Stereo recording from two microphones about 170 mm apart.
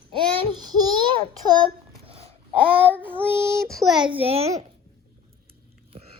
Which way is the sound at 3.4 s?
15° right (ahead or behind).